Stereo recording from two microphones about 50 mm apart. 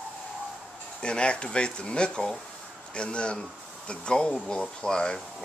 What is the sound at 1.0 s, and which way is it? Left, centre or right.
Speech, centre.